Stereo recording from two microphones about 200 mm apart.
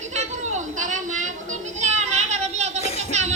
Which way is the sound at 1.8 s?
35° right (ahead or behind).